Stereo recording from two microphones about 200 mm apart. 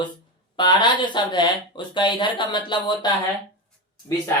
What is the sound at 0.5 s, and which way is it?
Speech, 25° left (ahead or behind).